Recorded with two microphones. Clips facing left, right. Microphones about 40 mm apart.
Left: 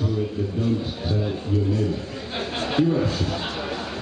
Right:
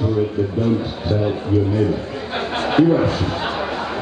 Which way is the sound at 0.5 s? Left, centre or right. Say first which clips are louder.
Right 5 dB; right.